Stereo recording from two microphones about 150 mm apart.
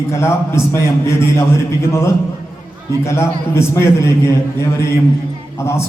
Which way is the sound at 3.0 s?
15° left (ahead or behind).